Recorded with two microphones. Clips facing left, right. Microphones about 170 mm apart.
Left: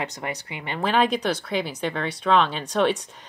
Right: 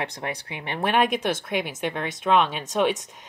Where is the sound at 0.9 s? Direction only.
20° right (ahead or behind).